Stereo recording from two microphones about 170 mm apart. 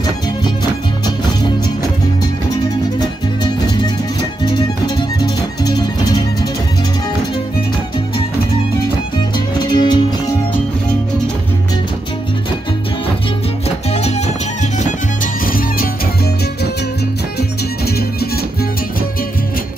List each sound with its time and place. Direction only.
3.6 s music: 25° left (ahead or behind)
9.6 s music: 25° left (ahead or behind)
13.9 s music: 40° left (ahead or behind)
15.4 s music: 55° left (ahead or behind)
17.4 s music: 65° left (ahead or behind)